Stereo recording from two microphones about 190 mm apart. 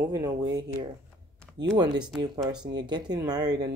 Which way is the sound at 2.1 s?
20° right (ahead or behind).